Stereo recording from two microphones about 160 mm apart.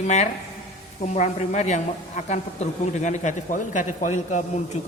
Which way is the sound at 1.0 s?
45° left (ahead or behind).